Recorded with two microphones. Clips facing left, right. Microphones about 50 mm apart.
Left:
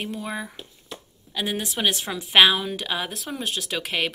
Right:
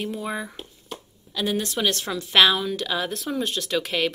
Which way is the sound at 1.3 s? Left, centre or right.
Centre.